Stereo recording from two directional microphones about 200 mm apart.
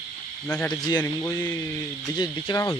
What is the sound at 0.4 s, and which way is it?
Speech, 5° left (ahead or behind).